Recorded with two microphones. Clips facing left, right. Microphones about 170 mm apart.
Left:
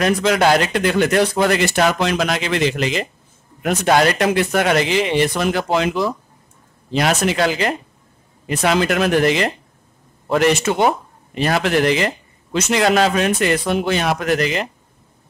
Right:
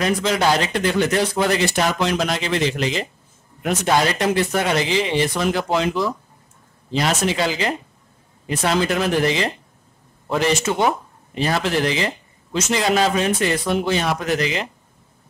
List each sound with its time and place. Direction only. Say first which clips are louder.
0.0 s speech: left 3 dB; 60° left (ahead or behind)